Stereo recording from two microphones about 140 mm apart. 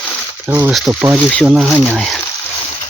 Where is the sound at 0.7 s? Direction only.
Centre (ahead or behind).